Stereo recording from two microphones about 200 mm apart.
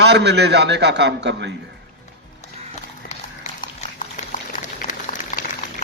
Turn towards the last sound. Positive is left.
turn(degrees=40)  # may be behind; listen again after turning